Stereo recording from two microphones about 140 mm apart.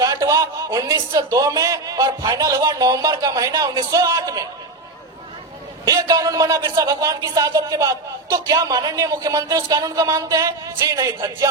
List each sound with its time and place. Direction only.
0.0 s a man's voice: 25° right (ahead or behind)
5.8 s a man's voice: 25° right (ahead or behind)